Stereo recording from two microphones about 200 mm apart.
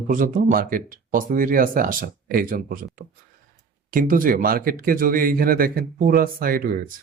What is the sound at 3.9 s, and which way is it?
Speech, 45° right (ahead or behind).